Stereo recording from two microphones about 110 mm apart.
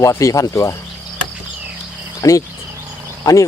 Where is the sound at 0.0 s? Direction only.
30° left (ahead or behind).